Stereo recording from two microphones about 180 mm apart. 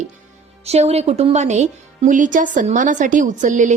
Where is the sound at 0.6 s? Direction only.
35° right (ahead or behind).